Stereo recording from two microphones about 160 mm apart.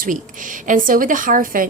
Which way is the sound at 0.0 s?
55° right (ahead or behind).